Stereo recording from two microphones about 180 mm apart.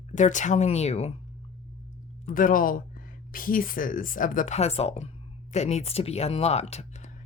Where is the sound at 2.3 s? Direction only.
50° left (ahead or behind).